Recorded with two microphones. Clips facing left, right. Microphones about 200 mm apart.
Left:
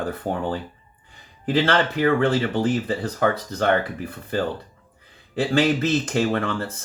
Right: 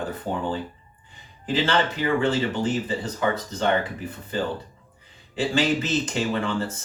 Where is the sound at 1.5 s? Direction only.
60° left (ahead or behind).